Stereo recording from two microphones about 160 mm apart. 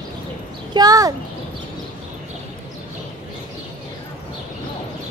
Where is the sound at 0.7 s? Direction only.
20° right (ahead or behind).